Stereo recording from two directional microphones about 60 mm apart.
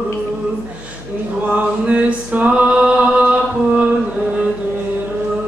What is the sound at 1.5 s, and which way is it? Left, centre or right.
Music, right.